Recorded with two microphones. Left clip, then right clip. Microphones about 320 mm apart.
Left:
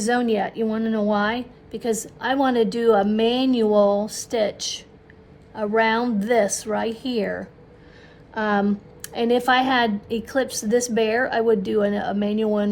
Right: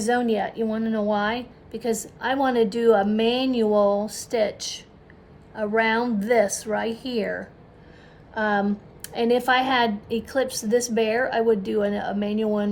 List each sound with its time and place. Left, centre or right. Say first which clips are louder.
0.0 s a woman's voice: left 1 dB; left
5.8 s a woman's voice: left 2 dB; left
8.3 s a woman's voice: left 1 dB; left